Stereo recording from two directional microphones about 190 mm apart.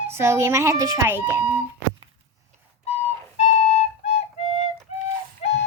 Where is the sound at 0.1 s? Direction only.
15° right (ahead or behind).